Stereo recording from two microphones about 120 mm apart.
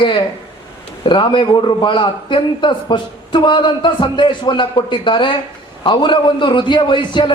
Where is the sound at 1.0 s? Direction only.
45° left (ahead or behind).